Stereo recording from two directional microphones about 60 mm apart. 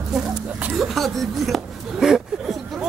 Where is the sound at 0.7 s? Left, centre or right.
Centre.